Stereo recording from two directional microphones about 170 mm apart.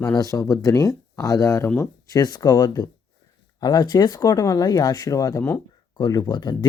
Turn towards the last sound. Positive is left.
turn(degrees=25)  # may be behind; listen again after turning